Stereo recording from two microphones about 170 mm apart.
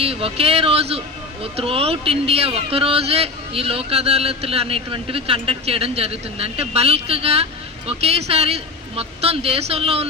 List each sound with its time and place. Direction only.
0.0 s speech: 35° right (ahead or behind)